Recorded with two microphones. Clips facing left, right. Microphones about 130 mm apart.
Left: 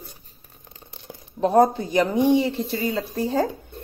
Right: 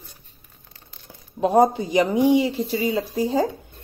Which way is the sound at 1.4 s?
10° right (ahead or behind).